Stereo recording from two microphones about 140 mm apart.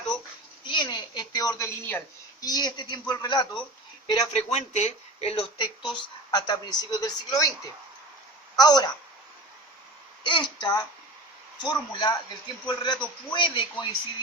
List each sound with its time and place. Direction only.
0.6 s a sound: 35° left (ahead or behind)
2.4 s a woman's voice: 30° left (ahead or behind)
4.2 s speech: 50° left (ahead or behind)
5.5 s a woman's voice: 35° left (ahead or behind)
10.2 s a woman's voice: 35° left (ahead or behind)